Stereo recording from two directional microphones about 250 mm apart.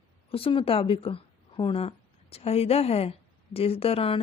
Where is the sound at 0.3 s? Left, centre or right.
Left.